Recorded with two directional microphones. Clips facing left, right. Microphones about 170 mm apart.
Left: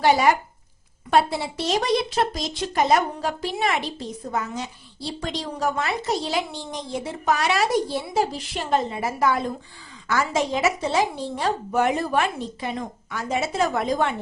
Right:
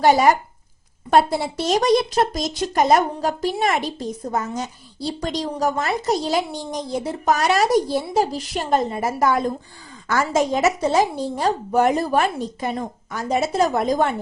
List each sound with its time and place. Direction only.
0.0 s speech: 45° right (ahead or behind)